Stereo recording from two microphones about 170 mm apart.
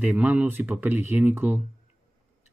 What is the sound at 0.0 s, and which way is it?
Speech, 10° right (ahead or behind).